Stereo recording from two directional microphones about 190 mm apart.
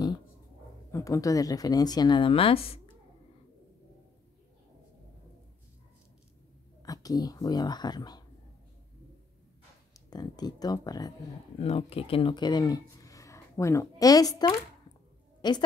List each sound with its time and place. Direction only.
0.9 s a woman's voice: 15° left (ahead or behind)
6.8 s speech: 20° left (ahead or behind)
9.9 s a woman's voice: 20° left (ahead or behind)
11.6 s a woman's voice: 30° left (ahead or behind)